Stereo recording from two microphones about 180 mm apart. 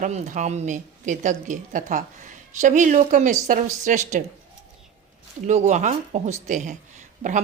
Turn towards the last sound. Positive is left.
turn(degrees=-45)  # may be behind; listen again after turning